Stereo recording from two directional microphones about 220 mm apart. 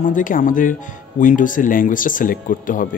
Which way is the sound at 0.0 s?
35° left (ahead or behind).